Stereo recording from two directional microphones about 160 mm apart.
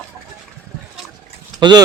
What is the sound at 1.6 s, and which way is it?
Speech, 25° right (ahead or behind).